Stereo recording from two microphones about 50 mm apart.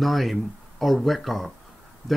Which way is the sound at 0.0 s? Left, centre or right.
Centre.